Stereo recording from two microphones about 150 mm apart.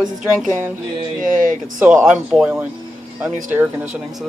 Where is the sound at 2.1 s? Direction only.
5° right (ahead or behind).